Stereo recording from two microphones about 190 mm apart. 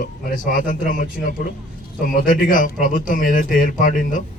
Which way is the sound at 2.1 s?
45° left (ahead or behind).